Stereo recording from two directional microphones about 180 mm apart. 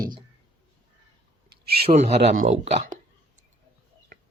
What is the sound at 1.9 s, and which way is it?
Speech, 35° right (ahead or behind).